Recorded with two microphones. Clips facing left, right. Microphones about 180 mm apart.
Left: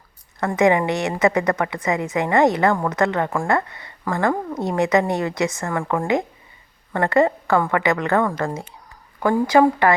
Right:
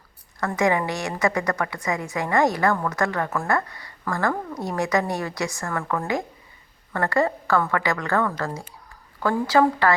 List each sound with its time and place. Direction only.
0.3 s a woman's voice: 20° left (ahead or behind)